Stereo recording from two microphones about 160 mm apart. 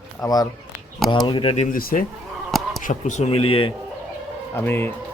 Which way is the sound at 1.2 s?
30° left (ahead or behind).